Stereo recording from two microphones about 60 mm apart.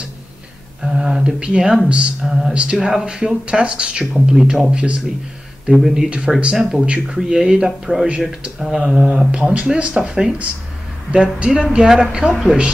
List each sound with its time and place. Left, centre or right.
0.8 s speech: centre
5.7 s speech: centre
6.0 s speech: centre
6.5 s speech: centre